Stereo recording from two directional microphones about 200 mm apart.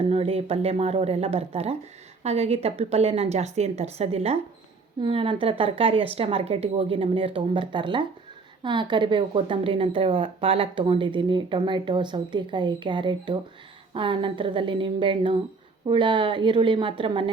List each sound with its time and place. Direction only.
0.1 s a woman's voice: 30° right (ahead or behind)